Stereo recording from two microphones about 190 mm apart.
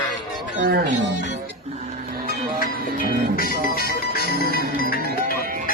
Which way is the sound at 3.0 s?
50° left (ahead or behind).